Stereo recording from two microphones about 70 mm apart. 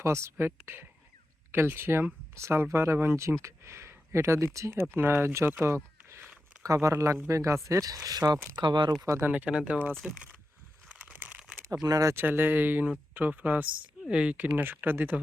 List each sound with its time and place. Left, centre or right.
0.0 s speech: right
5.6 s a sound: right
6.6 s speech: right
8.5 s speech: right
9.3 s speech: centre
9.9 s speech: centre
10.8 s crumpling: centre
11.8 s speech: right
12.1 s speech: right